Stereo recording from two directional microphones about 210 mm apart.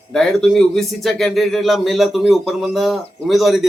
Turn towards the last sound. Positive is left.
turn(degrees=0)  # may be behind; listen again after turning